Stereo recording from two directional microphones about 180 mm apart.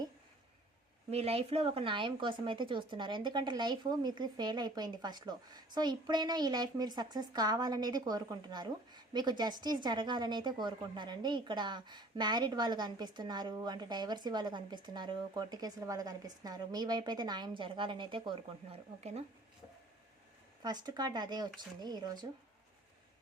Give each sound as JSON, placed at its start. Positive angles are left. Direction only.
{"t": 1.1, "sound": "a woman's voice", "side_deg": -35}
{"t": 20.6, "sound": "a woman's voice", "side_deg": -25}